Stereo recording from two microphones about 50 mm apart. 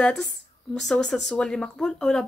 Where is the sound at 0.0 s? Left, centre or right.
Centre.